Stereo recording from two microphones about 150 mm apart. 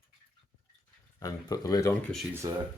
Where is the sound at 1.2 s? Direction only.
25° left (ahead or behind).